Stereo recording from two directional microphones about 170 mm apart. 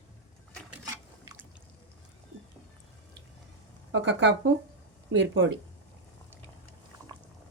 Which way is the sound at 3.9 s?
90° right.